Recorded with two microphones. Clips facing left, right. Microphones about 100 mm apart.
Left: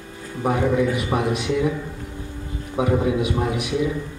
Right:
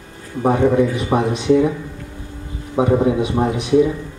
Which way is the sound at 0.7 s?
30° right (ahead or behind).